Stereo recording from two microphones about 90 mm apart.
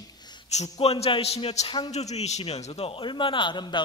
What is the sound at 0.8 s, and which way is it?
Speech, 75° left (ahead or behind).